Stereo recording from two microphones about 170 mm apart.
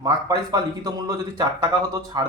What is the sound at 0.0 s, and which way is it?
Speech, 20° right (ahead or behind).